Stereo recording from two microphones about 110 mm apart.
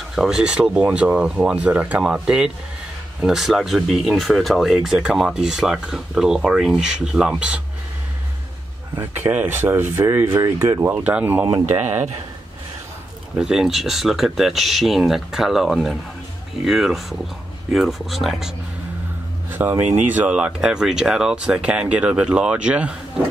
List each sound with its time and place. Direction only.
0.1 s speech: 5° right (ahead or behind)
9.0 s speech: 20° right (ahead or behind)
11.6 s speech: 90° right
13.4 s speech: 5° right (ahead or behind)
19.6 s speech: 20° right (ahead or behind)